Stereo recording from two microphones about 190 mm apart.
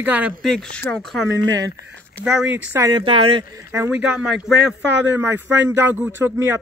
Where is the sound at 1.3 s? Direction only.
85° right.